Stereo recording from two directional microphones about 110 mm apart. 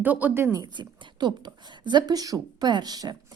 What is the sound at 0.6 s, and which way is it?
Speech, 45° right (ahead or behind).